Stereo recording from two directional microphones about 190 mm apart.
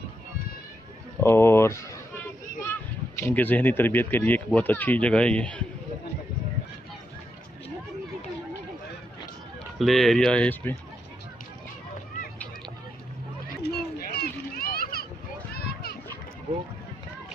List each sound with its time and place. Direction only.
1.2 s speech: 15° left (ahead or behind)
3.2 s speech: 10° left (ahead or behind)
9.7 s speech: centre (ahead or behind)
13.6 s children playing: 55° left (ahead or behind)